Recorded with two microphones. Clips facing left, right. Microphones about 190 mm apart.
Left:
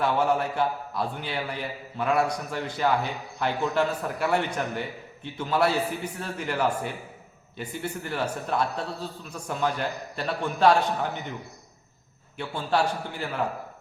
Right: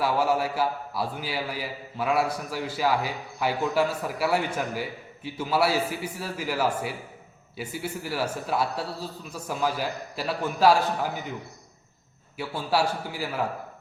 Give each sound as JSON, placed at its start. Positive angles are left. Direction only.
{"t": 0.0, "sound": "a man's voice", "side_deg": -5}
{"t": 12.4, "sound": "a man's voice", "side_deg": -5}